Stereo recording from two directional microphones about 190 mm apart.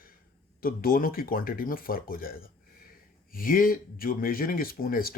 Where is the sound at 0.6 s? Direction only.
50° left (ahead or behind).